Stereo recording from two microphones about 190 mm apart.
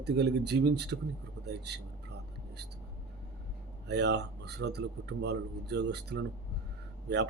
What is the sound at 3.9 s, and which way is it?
A man's voice, 65° right (ahead or behind).